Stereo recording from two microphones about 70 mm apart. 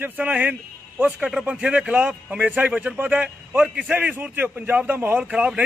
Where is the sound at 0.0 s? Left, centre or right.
Right.